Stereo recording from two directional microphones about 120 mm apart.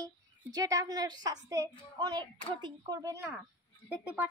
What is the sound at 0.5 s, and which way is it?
A woman's voice, 30° right (ahead or behind).